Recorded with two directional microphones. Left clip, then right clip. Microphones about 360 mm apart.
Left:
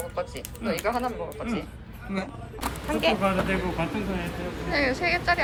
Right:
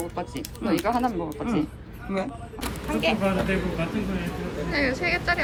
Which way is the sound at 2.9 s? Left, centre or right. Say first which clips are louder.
Left 1 dB; left.